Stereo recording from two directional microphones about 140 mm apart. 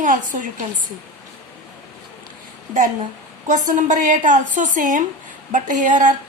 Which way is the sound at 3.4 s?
60° right (ahead or behind).